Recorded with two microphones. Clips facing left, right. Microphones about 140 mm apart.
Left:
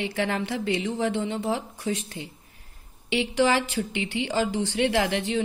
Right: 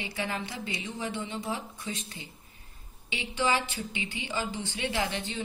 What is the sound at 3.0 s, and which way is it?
A woman's voice, 75° left (ahead or behind).